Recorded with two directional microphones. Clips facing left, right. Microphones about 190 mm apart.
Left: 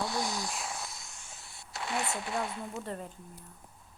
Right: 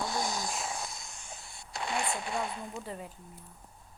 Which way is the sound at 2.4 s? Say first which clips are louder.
Even; 20° right (ahead or behind).